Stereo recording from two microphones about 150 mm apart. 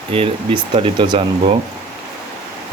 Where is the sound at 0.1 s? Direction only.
40° right (ahead or behind).